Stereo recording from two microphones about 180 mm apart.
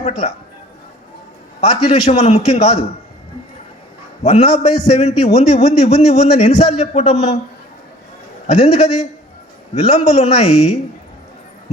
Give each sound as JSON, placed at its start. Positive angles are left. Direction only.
{"t": 0.0, "sound": "a man's voice", "side_deg": 35}
{"t": 1.6, "sound": "a man's voice", "side_deg": 35}
{"t": 4.2, "sound": "a man's voice", "side_deg": 35}
{"t": 8.4, "sound": "a man's voice", "side_deg": 35}